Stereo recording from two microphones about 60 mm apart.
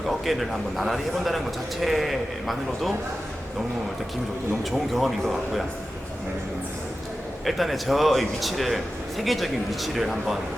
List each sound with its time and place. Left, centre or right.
0.1 s a man's voice: centre
4.7 s a man's voice: centre
7.4 s a man's voice: centre